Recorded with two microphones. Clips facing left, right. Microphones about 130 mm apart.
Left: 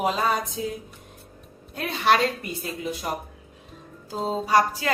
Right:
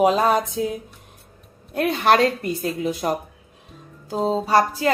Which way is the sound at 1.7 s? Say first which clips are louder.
Right 4 dB; 50° right (ahead or behind).